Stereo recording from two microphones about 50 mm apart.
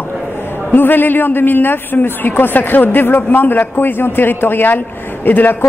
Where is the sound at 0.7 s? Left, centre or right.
Left.